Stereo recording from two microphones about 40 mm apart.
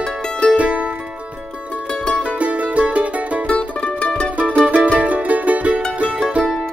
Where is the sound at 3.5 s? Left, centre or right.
Left.